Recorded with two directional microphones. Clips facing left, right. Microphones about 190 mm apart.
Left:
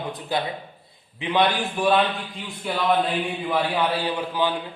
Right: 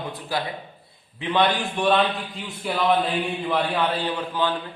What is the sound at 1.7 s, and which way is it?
A man's voice, 5° left (ahead or behind).